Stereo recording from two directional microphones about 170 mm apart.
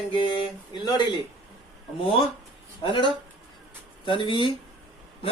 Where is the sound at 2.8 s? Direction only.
30° left (ahead or behind).